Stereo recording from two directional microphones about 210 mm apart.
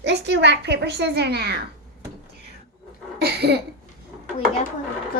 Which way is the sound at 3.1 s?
50° right (ahead or behind).